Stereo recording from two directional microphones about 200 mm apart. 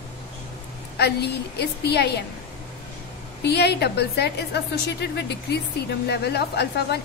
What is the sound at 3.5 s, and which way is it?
A woman's voice, 55° left (ahead or behind).